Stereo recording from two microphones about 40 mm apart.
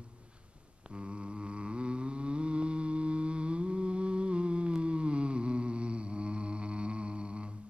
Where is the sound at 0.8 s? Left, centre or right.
Right.